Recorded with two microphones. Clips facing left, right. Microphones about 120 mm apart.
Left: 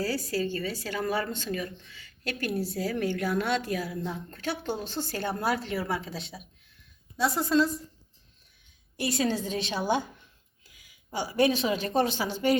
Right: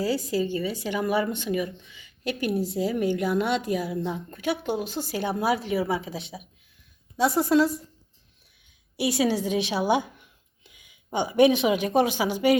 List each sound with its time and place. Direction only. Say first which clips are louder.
0.0 s a woman's voice: right 4 dB; 15° right (ahead or behind)
7.2 s a woman's voice: right 4 dB; 15° right (ahead or behind)
9.0 s a woman's voice: right 4 dB; 15° right (ahead or behind)